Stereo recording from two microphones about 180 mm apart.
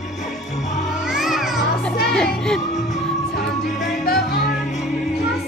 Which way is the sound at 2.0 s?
5° left (ahead or behind).